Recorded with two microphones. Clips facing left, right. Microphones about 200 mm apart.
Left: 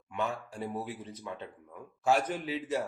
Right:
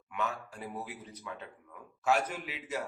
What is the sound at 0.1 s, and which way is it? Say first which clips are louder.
A man's voice: left 2 dB; 30° left (ahead or behind).